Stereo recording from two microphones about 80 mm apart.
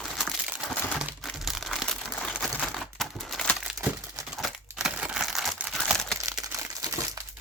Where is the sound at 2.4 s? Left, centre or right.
Centre.